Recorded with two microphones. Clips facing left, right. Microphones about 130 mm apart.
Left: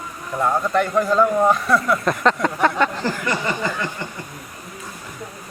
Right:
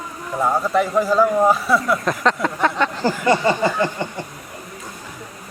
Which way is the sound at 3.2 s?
30° right (ahead or behind).